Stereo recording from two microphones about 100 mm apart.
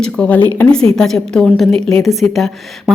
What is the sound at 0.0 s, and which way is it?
Speech, 15° left (ahead or behind).